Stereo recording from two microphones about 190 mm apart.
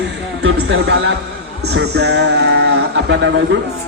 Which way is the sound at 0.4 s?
65° right (ahead or behind).